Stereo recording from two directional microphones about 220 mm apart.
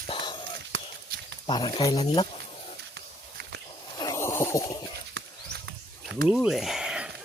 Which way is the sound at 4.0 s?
15° left (ahead or behind).